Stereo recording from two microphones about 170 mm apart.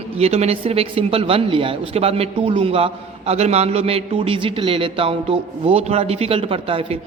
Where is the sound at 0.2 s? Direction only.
40° right (ahead or behind).